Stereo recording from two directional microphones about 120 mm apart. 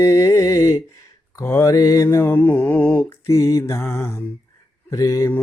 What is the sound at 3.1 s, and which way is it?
Mantra, 25° left (ahead or behind).